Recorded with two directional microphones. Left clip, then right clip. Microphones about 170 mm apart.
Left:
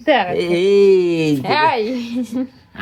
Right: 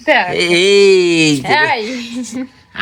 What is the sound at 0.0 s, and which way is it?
Speech, 55° left (ahead or behind).